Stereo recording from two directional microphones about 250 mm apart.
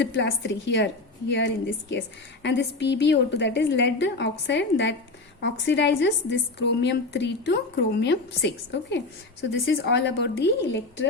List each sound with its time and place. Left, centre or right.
0.0 s a woman's voice: left